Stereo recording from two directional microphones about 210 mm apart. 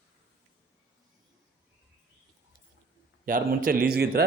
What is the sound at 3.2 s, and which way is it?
Speech, 40° right (ahead or behind).